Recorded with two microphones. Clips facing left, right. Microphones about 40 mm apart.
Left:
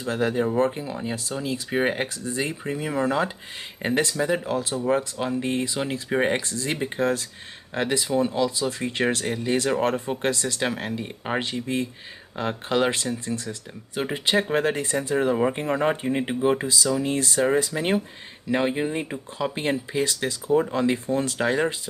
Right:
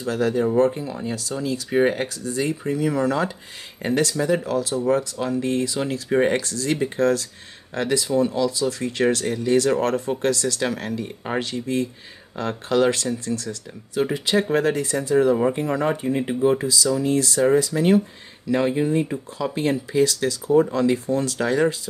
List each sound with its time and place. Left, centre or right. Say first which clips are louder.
0.1 s speech: right 2 dB; left
0.7 s speech: right 3 dB; centre
4.1 s speech: right 2 dB; centre